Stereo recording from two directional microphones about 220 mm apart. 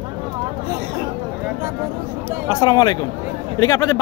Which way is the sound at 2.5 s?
15° left (ahead or behind).